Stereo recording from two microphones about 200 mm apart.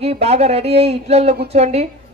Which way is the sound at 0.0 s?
30° right (ahead or behind).